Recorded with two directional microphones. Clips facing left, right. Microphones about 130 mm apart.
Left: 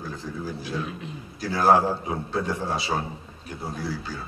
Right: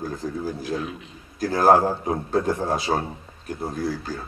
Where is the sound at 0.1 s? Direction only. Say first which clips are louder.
Right 4 dB; 45° right (ahead or behind).